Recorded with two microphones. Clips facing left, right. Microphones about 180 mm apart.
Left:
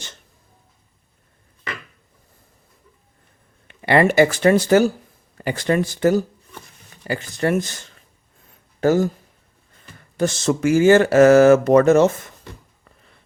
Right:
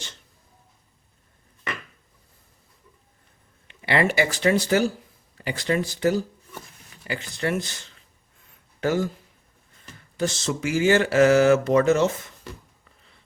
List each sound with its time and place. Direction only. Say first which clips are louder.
3.7 s speech: left 6 dB; 50° left (ahead or behind)
10.2 s speech: left 6 dB; 50° left (ahead or behind)